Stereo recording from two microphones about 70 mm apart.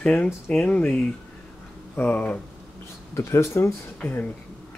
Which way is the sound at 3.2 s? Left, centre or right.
Left.